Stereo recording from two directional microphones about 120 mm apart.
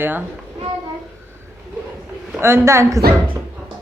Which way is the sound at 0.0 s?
15° right (ahead or behind).